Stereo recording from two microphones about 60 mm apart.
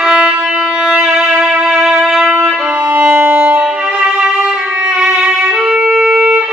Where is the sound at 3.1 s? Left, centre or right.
Right.